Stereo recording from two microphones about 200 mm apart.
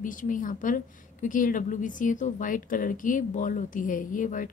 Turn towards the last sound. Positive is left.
turn(degrees=40)  # may be behind; listen again after turning